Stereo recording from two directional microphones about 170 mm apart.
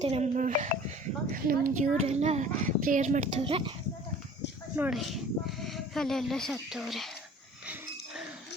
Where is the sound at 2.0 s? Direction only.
40° right (ahead or behind).